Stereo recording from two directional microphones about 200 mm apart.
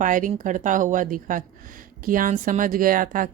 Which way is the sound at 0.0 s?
40° right (ahead or behind).